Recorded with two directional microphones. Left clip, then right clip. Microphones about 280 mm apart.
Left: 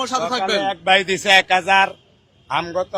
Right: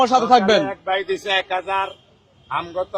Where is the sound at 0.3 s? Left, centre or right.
Right.